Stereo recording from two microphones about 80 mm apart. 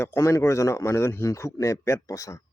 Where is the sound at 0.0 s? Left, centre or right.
Left.